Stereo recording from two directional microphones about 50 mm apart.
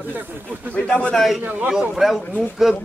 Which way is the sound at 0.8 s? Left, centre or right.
Left.